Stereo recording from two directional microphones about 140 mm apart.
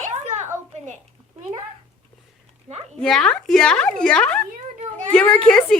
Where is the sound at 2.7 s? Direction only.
45° right (ahead or behind).